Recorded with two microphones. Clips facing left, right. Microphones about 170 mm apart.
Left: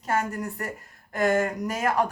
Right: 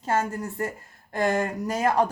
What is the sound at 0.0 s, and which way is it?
Speech, 25° right (ahead or behind).